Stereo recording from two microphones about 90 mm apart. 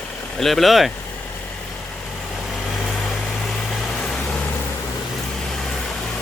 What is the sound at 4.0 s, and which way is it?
Vehicle, 10° left (ahead or behind).